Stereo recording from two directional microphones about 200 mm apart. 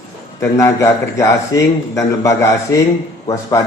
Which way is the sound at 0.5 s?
15° left (ahead or behind).